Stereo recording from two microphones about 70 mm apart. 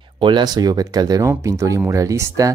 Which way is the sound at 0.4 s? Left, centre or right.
Right.